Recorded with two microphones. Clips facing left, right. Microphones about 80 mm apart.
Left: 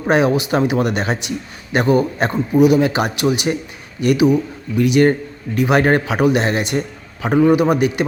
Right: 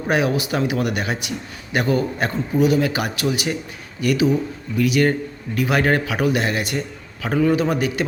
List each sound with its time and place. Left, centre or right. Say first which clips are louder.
0.1 s a man's voice: left 5 dB; left